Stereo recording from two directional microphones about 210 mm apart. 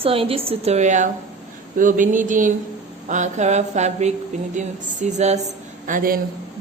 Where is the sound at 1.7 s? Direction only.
40° right (ahead or behind).